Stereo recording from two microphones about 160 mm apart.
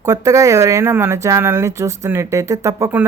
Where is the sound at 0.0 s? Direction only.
20° right (ahead or behind).